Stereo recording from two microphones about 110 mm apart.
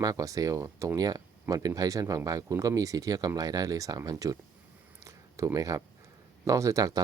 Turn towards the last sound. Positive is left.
turn(degrees=-35)  # may be behind; listen again after turning